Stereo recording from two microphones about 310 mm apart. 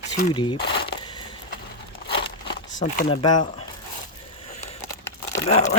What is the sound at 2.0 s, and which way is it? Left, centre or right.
Crumpling, centre.